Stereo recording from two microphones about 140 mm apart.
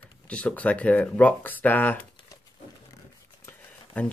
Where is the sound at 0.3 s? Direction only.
10° left (ahead or behind).